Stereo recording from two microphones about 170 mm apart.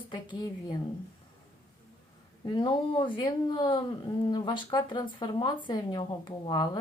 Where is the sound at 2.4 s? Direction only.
25° left (ahead or behind).